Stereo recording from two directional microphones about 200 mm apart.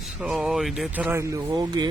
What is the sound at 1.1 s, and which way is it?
Speech, 15° right (ahead or behind).